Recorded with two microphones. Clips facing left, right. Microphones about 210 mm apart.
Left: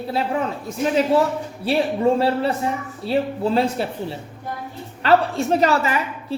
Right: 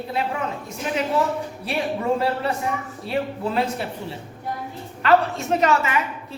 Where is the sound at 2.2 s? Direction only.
30° left (ahead or behind).